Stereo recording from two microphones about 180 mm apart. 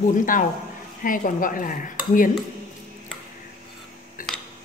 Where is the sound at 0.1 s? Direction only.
45° left (ahead or behind).